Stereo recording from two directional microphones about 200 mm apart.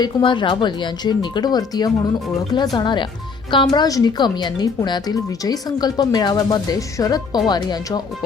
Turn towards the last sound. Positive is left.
turn(degrees=20)  # may be behind; listen again after turning